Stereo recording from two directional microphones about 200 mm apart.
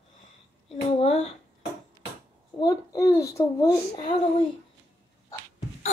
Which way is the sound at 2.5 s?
15° left (ahead or behind).